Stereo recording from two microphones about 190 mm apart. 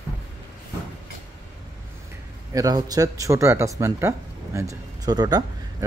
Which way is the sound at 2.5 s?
20° right (ahead or behind).